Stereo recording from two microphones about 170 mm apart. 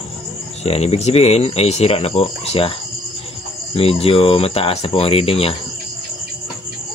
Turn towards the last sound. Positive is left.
turn(degrees=35)  # may be behind; listen again after turning